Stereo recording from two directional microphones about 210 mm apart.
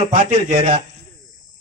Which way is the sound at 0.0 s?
35° right (ahead or behind).